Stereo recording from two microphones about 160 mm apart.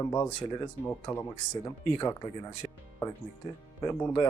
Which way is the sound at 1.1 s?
35° left (ahead or behind).